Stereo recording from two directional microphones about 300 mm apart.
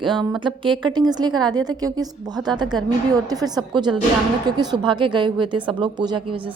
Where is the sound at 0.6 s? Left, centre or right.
Centre.